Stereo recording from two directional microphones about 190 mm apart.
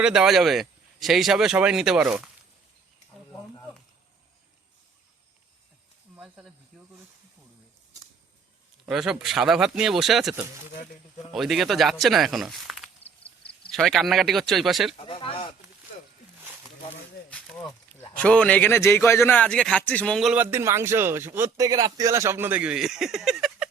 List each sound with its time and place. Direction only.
0.0 s a man's voice: 5° right (ahead or behind)
6.1 s snake: 5° right (ahead or behind)
8.9 s a man's voice: centre (ahead or behind)
13.2 s a sound: 30° left (ahead or behind)
13.7 s a man's voice: centre (ahead or behind)
14.9 s speech: 25° left (ahead or behind)
17.9 s a man's voice: 5° left (ahead or behind)